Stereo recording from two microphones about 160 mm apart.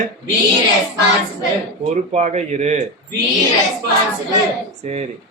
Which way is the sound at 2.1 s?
45° right (ahead or behind).